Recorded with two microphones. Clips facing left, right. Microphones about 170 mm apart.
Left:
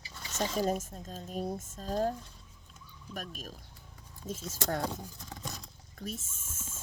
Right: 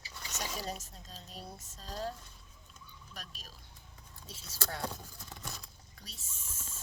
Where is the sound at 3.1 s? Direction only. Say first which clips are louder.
Left 10 dB; 50° left (ahead or behind).